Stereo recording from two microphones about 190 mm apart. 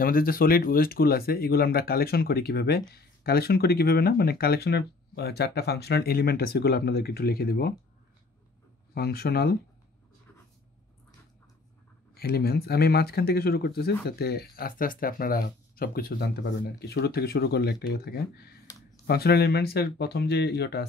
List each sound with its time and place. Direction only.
0.0 s speech: 50° left (ahead or behind)
8.9 s speech: 55° left (ahead or behind)
12.1 s speech: 55° left (ahead or behind)